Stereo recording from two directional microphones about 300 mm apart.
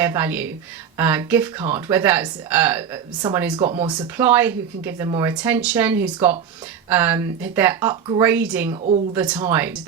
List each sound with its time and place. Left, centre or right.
0.0 s speech: centre
8.7 s a woman's voice: right
9.1 s speech: centre